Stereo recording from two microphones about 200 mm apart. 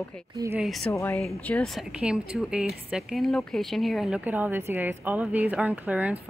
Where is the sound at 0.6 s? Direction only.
Centre (ahead or behind).